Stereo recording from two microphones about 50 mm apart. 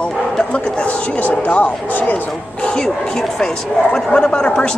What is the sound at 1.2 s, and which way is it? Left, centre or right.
Speech, left.